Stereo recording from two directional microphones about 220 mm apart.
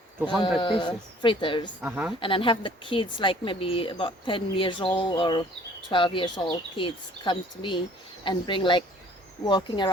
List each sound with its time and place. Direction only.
0.6 s a woman's voice: 20° left (ahead or behind)
1.8 s a woman's voice: 10° right (ahead or behind)
2.2 s a woman's voice: 25° left (ahead or behind)